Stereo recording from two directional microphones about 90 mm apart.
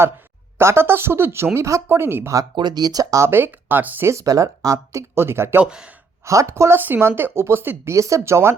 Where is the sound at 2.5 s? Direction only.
55° right (ahead or behind).